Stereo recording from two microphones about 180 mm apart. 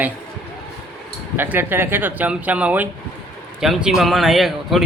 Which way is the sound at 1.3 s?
10° right (ahead or behind).